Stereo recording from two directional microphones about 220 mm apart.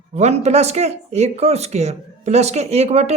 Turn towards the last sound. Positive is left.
turn(degrees=-30)  # may be behind; listen again after turning